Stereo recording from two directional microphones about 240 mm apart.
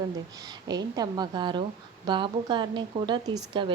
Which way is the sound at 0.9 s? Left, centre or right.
Centre.